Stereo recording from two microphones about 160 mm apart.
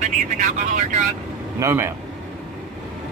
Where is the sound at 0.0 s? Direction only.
50° right (ahead or behind).